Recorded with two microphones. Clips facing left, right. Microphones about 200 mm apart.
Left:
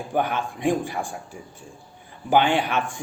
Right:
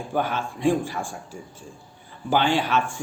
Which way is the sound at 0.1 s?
15° left (ahead or behind).